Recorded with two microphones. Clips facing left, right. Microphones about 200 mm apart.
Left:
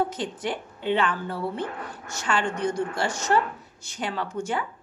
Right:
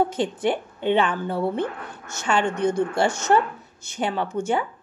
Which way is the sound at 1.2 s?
20° right (ahead or behind).